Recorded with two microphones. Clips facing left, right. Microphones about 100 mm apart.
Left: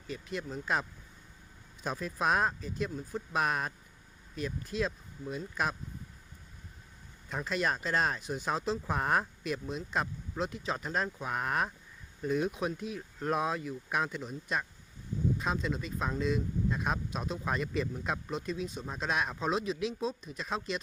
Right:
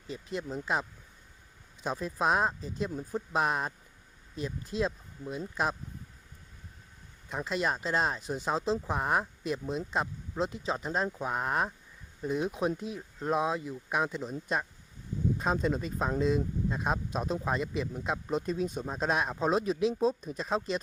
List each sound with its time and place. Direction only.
0.1 s speech: 25° right (ahead or behind)
7.3 s speech: 20° right (ahead or behind)
9.4 s speech: 30° right (ahead or behind)
12.5 s speech: 30° right (ahead or behind)
13.0 s speech: 20° right (ahead or behind)
18.3 s speech: 40° right (ahead or behind)